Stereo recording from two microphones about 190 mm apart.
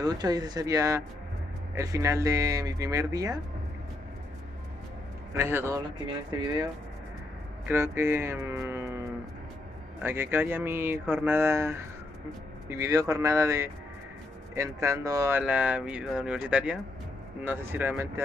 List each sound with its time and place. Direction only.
0.0 s speech: 20° right (ahead or behind)
5.3 s speech: 15° right (ahead or behind)
10.0 s speech: 10° right (ahead or behind)